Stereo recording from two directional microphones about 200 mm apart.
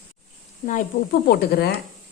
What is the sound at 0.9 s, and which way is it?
Speech, 40° left (ahead or behind).